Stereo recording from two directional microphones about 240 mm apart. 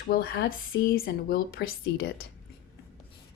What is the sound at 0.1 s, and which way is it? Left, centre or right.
A woman's voice, left.